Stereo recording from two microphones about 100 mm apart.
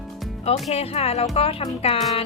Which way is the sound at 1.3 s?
70° left (ahead or behind).